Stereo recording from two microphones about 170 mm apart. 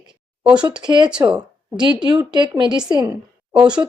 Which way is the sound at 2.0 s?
25° right (ahead or behind).